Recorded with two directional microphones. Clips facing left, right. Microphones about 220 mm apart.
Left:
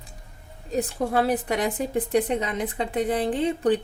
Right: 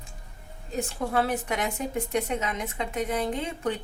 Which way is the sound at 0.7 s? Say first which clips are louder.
Left 5 dB; 35° left (ahead or behind).